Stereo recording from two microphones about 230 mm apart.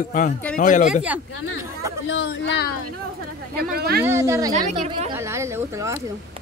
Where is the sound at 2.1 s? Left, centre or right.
Left.